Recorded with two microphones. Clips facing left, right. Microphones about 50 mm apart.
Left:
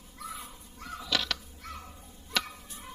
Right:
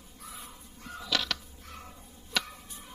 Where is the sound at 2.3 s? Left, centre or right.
Centre.